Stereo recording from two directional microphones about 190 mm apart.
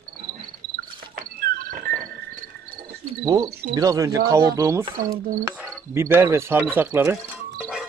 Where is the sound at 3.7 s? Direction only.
15° right (ahead or behind).